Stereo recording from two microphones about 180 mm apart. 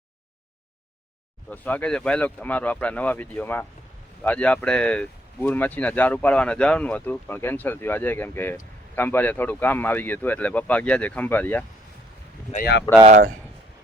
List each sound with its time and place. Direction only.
1.5 s speech: 10° left (ahead or behind)
13.1 s speech: 45° right (ahead or behind)